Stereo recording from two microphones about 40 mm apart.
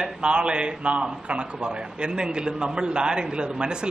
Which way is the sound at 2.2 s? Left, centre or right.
Right.